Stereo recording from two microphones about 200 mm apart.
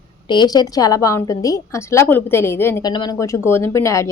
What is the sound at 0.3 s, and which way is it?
A woman's voice, 20° left (ahead or behind).